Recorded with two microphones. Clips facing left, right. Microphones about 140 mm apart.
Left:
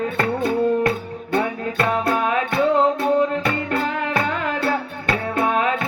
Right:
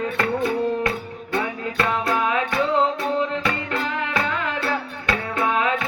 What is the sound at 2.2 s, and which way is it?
Music, 50° left (ahead or behind).